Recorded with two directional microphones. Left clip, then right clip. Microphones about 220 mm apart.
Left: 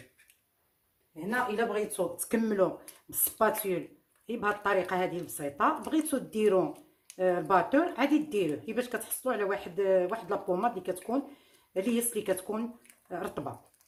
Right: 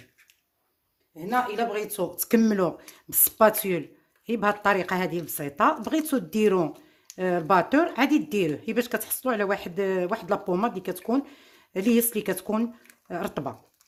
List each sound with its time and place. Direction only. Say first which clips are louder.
1.5 s speech: right 2 dB; 50° right (ahead or behind)